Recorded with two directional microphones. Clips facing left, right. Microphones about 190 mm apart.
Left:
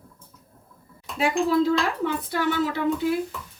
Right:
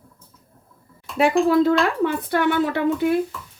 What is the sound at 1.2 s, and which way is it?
Speech, 60° right (ahead or behind).